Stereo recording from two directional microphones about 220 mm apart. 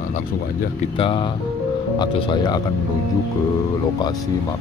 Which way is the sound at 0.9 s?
25° left (ahead or behind).